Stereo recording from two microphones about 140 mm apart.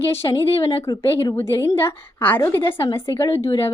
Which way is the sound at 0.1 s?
20° left (ahead or behind).